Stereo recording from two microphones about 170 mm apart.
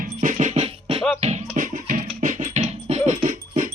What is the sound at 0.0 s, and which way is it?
Music, 50° right (ahead or behind).